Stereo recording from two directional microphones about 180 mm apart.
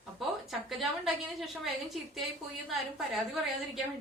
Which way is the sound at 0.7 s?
Centre (ahead or behind).